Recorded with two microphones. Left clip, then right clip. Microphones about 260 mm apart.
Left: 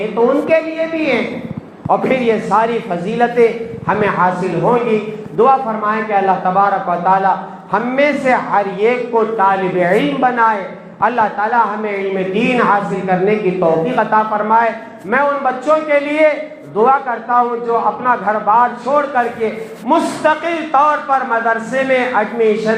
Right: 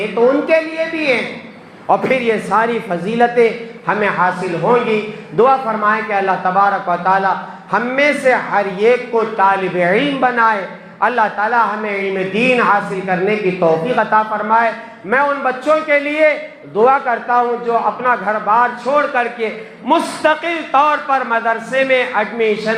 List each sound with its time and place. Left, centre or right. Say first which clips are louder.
0.5 s speech: even; right
1.9 s a man's voice: even; right
5.4 s a man's voice: even; right